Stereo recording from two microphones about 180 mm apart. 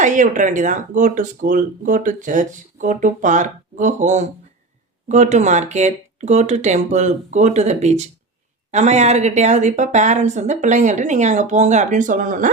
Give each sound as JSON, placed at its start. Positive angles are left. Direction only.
{"t": 0.0, "sound": "speech", "side_deg": -45}